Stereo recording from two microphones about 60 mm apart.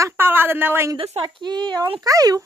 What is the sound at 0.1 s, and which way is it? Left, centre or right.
Speech, right.